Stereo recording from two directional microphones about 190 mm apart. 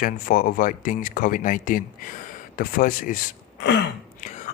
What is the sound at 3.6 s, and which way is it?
Throat clearing, 65° left (ahead or behind).